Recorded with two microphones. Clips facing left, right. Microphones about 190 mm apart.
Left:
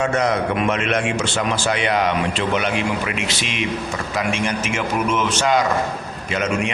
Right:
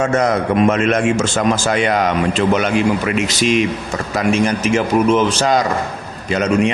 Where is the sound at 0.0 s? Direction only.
45° right (ahead or behind).